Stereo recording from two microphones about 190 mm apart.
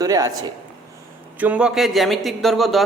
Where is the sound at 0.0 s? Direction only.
20° right (ahead or behind).